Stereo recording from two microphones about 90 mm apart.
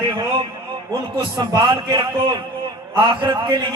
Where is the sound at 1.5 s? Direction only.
55° right (ahead or behind).